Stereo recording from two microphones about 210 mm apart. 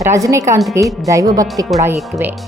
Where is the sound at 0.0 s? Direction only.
15° right (ahead or behind).